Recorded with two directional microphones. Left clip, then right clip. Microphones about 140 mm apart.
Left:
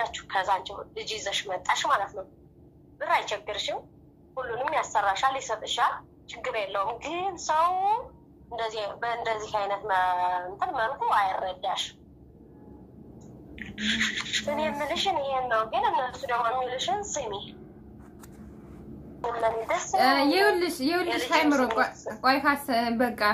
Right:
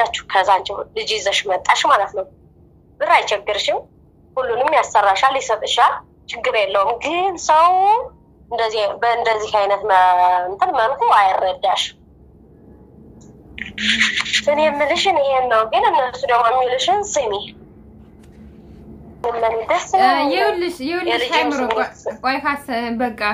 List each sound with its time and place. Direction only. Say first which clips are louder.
0.0 s a woman's voice: right 12 dB; 60° right (ahead or behind)
13.6 s a woman's voice: right 11 dB; 60° right (ahead or behind)
19.2 s a woman's voice: right 9 dB; 45° right (ahead or behind)
20.0 s a woman's voice: right 6 dB; centre (ahead or behind)
22.1 s a woman's voice: right 3 dB; centre (ahead or behind)